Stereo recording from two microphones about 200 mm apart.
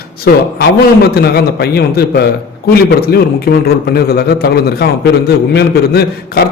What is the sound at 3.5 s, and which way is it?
A man's voice, 45° left (ahead or behind).